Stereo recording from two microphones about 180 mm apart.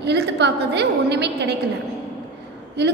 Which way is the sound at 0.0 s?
70° right (ahead or behind).